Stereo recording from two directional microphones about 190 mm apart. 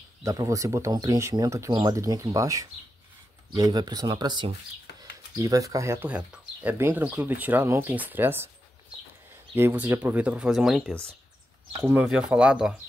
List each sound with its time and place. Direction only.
0.2 s speech: 15° right (ahead or behind)
9.6 s speech: 10° right (ahead or behind)
11.8 s speech: 10° right (ahead or behind)